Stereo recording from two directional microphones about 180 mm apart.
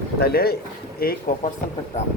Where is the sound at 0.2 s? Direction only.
60° left (ahead or behind).